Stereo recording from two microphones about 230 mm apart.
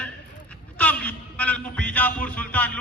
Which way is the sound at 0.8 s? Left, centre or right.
Centre.